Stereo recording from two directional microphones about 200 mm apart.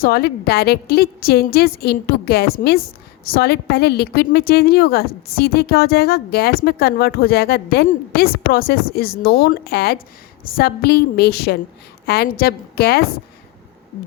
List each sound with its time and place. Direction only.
0.0 s a woman's voice: 50° left (ahead or behind)